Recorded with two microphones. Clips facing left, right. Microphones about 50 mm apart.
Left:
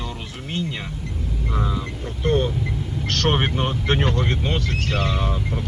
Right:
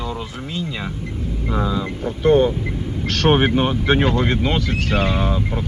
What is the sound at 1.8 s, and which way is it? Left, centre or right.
Speech, right.